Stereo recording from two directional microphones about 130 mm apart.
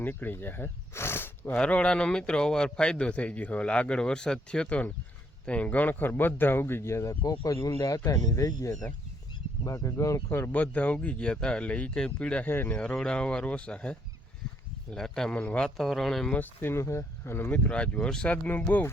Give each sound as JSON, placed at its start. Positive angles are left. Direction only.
{"t": 0.0, "sound": "speech", "side_deg": 15}